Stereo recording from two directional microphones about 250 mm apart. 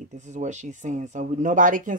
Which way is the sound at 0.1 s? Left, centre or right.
Right.